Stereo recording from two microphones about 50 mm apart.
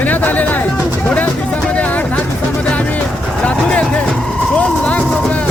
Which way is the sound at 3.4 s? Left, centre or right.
Left.